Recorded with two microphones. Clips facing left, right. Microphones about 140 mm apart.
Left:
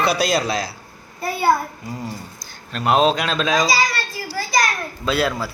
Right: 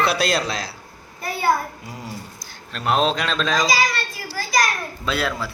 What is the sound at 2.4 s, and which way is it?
Speech, centre (ahead or behind).